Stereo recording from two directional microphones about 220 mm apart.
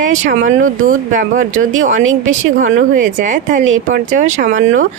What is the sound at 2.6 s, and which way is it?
Speech, 35° right (ahead or behind).